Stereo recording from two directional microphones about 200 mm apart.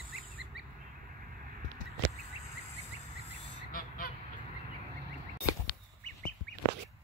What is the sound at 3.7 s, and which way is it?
Honk, 45° left (ahead or behind).